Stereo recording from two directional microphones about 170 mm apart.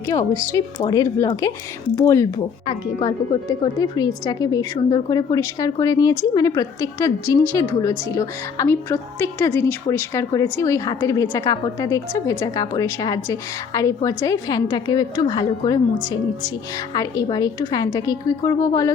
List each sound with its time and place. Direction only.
0.1 s a woman's voice: 20° left (ahead or behind)
16.9 s a woman's voice: 25° left (ahead or behind)